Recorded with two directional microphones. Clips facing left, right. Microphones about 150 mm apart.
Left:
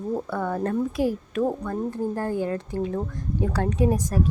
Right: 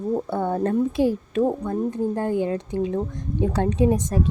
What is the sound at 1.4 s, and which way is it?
Speech, 15° right (ahead or behind).